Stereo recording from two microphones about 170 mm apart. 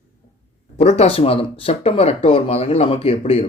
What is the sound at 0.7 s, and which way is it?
Speech, 40° left (ahead or behind).